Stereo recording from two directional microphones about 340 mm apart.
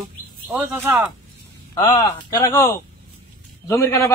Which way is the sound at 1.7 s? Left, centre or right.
Centre.